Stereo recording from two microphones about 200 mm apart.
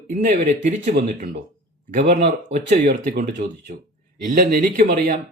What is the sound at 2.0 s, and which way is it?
Speech, 60° right (ahead or behind).